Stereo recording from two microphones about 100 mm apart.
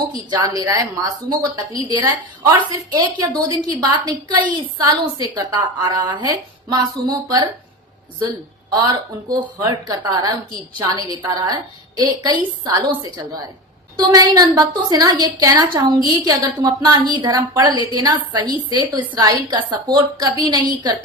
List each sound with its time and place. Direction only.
0.3 s a woman's voice: 45° right (ahead or behind)
9.3 s a woman's voice: 40° right (ahead or behind)
13.9 s a woman's voice: 40° right (ahead or behind)